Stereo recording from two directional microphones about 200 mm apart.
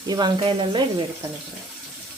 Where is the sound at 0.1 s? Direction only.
20° right (ahead or behind).